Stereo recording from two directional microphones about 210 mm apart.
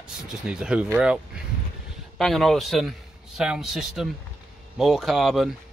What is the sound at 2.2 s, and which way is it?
Speech, centre (ahead or behind).